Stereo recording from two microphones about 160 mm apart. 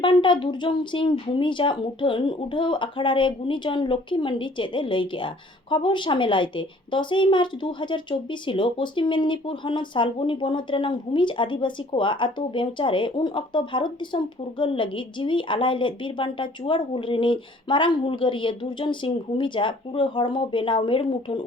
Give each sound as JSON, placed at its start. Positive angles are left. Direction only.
{"t": 0.0, "sound": "a woman's voice", "side_deg": 30}